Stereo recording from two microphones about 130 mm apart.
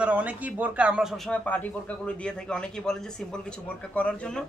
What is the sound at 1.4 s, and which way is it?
Speech, 10° left (ahead or behind).